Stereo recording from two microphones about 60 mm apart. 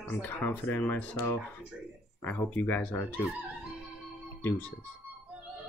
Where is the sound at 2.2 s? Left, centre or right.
Left.